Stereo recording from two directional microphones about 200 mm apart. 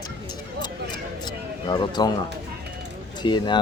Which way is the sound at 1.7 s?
20° left (ahead or behind).